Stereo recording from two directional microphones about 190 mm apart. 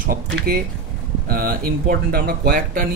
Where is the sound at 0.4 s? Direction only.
50° right (ahead or behind).